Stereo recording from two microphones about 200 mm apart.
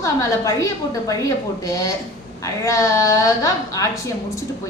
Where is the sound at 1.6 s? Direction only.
15° left (ahead or behind).